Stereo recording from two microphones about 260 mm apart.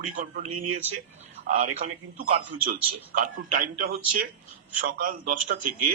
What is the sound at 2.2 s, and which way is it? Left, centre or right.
Music, right.